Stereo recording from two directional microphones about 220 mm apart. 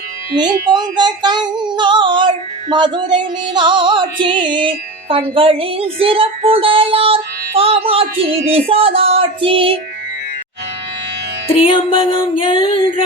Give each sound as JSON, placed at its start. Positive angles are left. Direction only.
{"t": 0.3, "sound": "child singing", "side_deg": -20}
{"t": 11.4, "sound": "music", "side_deg": 25}